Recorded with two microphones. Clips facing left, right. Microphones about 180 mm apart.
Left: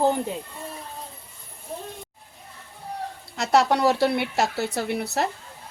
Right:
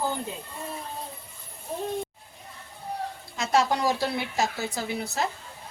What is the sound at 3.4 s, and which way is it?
Speech, 70° left (ahead or behind).